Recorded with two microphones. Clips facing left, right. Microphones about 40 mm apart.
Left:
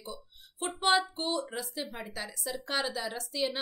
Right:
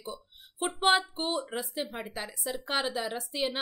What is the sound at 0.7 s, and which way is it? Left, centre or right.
A woman's voice, right.